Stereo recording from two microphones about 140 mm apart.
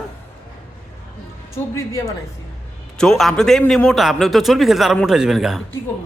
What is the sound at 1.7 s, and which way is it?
Speech, 20° left (ahead or behind).